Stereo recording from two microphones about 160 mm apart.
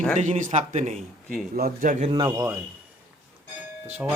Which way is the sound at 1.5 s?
65° right (ahead or behind).